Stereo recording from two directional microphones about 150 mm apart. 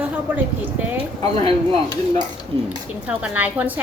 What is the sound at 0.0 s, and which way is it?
A woman's voice, 10° right (ahead or behind).